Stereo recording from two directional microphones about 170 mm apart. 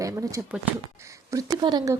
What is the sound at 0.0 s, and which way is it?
A woman's voice, 20° right (ahead or behind).